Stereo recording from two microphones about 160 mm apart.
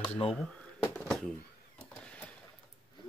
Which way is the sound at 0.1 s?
35° left (ahead or behind).